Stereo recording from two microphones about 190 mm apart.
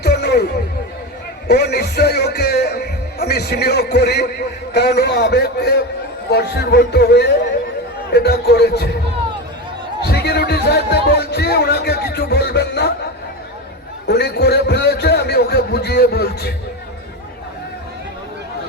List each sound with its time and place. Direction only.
0.0 s music: 60° left (ahead or behind)
1.5 s a man's voice: 60° left (ahead or behind)
10.1 s speech: 60° left (ahead or behind)
14.1 s a man's voice: 60° left (ahead or behind)